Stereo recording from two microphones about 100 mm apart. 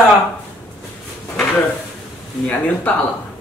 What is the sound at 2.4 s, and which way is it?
Speech, 15° left (ahead or behind).